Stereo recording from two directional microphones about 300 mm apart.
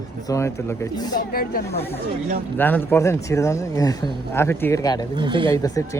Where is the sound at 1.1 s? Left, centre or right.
Left.